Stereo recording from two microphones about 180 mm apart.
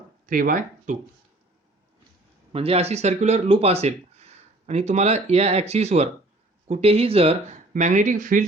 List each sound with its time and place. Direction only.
0.3 s speech: 50° right (ahead or behind)
2.5 s speech: 35° right (ahead or behind)